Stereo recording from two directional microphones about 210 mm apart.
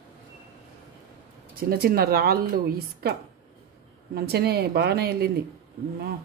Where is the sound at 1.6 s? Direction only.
45° right (ahead or behind).